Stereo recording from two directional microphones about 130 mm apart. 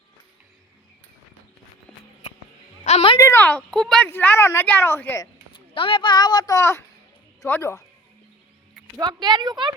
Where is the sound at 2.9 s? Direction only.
65° left (ahead or behind).